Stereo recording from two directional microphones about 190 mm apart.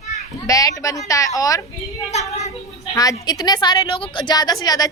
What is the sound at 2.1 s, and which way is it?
Speech, 35° left (ahead or behind).